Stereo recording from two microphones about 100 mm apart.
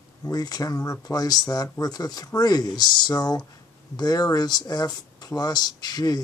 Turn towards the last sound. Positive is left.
turn(degrees=40)  # may be behind; listen again after turning